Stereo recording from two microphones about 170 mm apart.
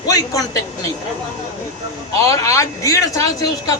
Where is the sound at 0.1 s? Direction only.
20° left (ahead or behind).